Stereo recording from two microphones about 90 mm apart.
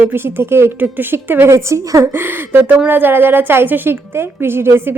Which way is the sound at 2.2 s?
25° right (ahead or behind).